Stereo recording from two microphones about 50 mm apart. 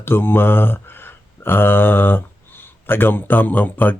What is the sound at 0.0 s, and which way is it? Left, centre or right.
Speech, left.